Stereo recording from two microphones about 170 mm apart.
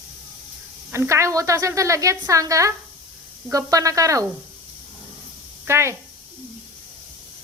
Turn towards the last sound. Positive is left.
turn(degrees=-15)  # may be behind; listen again after turning